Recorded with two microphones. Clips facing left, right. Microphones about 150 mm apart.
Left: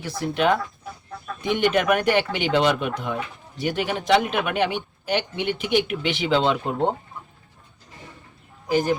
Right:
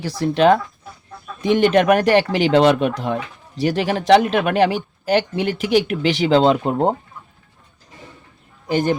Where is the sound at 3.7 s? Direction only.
90° right.